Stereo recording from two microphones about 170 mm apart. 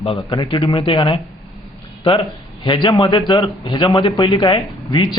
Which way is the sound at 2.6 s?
30° left (ahead or behind).